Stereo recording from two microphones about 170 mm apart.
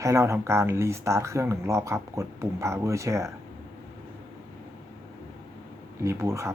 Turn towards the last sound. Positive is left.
turn(degrees=-15)  # may be behind; listen again after turning